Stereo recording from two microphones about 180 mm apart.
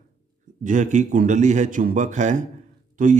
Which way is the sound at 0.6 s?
45° right (ahead or behind).